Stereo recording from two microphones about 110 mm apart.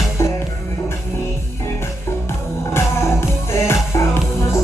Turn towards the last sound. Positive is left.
turn(degrees=25)  # may be behind; listen again after turning